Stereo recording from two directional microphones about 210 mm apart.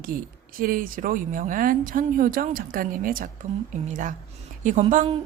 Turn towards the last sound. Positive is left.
turn(degrees=-30)  # may be behind; listen again after turning